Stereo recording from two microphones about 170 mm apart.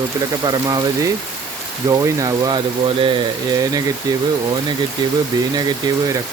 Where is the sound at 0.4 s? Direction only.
25° right (ahead or behind).